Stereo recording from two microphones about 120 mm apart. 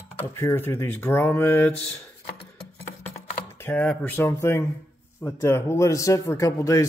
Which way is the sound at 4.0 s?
20° left (ahead or behind).